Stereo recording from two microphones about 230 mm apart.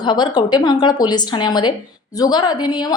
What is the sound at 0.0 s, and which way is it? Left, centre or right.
A woman's voice, centre.